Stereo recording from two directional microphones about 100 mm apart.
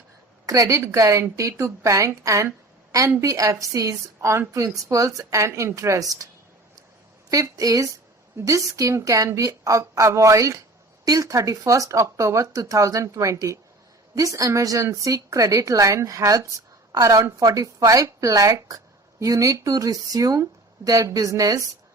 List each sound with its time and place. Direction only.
0.4 s a woman's voice: 35° right (ahead or behind)
7.3 s a woman's voice: 35° right (ahead or behind)